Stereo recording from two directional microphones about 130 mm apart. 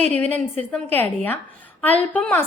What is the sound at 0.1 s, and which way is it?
A woman's voice, 10° left (ahead or behind).